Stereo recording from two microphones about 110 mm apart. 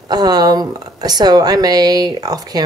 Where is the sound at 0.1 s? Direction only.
35° right (ahead or behind).